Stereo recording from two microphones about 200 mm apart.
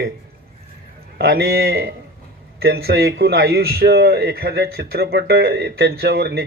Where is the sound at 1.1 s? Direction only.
55° right (ahead or behind).